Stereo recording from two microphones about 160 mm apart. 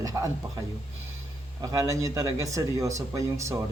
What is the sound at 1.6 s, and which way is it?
Speech, 20° right (ahead or behind).